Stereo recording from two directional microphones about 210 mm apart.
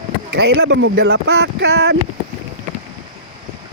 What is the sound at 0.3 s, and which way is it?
Speech, 50° right (ahead or behind).